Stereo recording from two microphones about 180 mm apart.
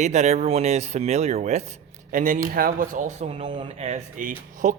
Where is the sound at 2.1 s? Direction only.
50° right (ahead or behind).